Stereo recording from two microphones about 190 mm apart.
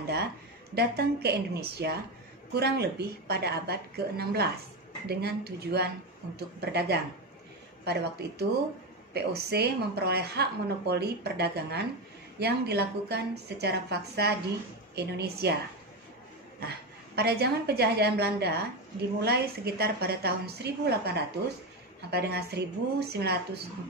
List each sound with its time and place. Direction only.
0.7 s a woman's voice: 60° right (ahead or behind)
16.5 s a woman's voice: 60° right (ahead or behind)